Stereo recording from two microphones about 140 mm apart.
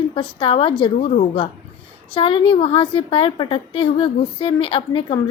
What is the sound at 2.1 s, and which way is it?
A woman's voice, 40° left (ahead or behind).